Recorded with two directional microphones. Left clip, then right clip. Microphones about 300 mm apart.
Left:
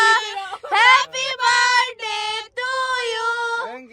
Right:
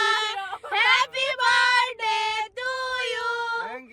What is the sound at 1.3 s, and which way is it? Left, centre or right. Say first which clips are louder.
Child singing: left 4 dB; centre.